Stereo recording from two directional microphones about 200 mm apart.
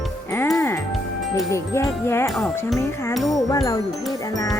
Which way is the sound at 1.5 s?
15° left (ahead or behind).